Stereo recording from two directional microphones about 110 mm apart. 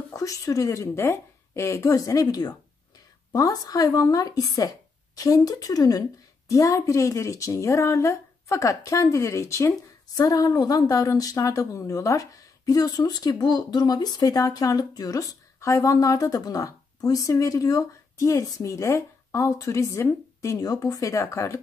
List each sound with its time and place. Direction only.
0.1 s a woman's voice: 30° left (ahead or behind)